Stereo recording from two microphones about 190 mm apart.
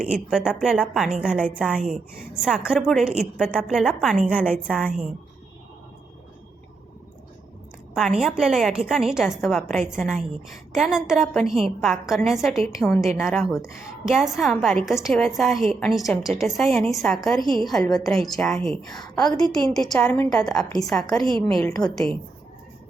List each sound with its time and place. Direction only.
0.0 s a woman's voice: 5° right (ahead or behind)
8.2 s a woman's voice: centre (ahead or behind)
18.9 s a woman's voice: 20° left (ahead or behind)
19.5 s a woman's voice: centre (ahead or behind)